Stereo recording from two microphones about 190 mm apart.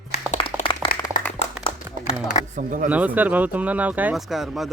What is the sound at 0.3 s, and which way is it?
Clapping, 25° left (ahead or behind).